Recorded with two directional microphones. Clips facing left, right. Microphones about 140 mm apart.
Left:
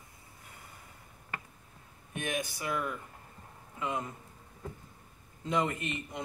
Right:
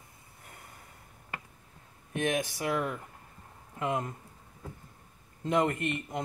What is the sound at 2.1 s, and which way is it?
Speech, 70° right (ahead or behind).